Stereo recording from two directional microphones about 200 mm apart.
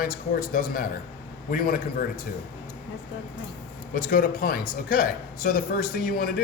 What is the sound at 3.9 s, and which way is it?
A man's voice, 45° left (ahead or behind).